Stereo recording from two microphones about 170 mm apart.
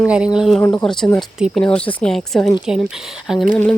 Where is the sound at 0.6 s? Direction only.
15° left (ahead or behind); by 3.5 s centre (ahead or behind).